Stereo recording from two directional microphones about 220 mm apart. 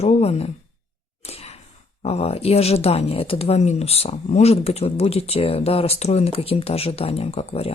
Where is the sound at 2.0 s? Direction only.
30° left (ahead or behind).